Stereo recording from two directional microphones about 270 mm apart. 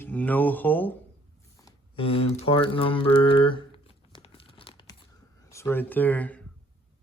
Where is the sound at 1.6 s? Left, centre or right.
Centre.